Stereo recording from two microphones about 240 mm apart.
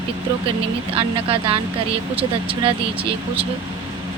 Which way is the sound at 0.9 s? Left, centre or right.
Right.